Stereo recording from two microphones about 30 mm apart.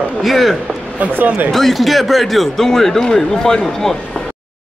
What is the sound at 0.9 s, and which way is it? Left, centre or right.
Speech, right.